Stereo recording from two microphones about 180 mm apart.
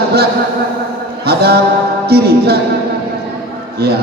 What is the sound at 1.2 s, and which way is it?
A man's voice, 60° right (ahead or behind).